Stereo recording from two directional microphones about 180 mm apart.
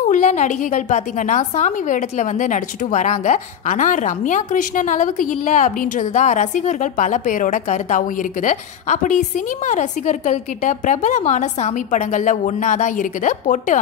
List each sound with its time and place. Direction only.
0.1 s a woman's voice: 45° left (ahead or behind)